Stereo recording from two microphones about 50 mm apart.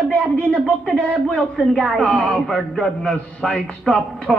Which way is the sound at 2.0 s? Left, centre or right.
Centre.